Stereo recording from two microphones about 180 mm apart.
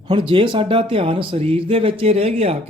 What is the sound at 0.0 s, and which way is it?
Speech, 30° right (ahead or behind).